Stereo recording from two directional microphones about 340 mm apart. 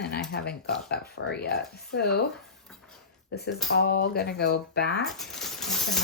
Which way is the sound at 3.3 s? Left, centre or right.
Left.